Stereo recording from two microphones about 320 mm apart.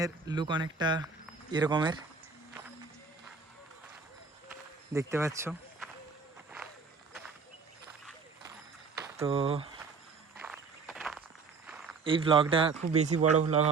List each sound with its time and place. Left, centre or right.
0.0 s speech: centre
4.9 s speech: centre
9.1 s speech: centre
10.4 s walk: centre
11.6 s a sound: centre
12.0 s speech: centre